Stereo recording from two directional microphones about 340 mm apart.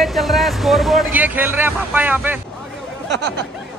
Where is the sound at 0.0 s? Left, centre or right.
Centre.